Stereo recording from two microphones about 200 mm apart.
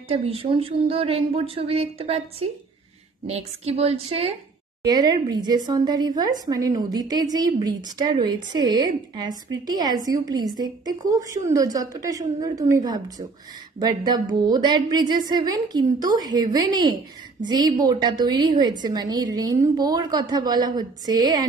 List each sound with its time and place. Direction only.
0.1 s a woman's voice: 30° right (ahead or behind)
4.8 s a woman's voice: 20° right (ahead or behind)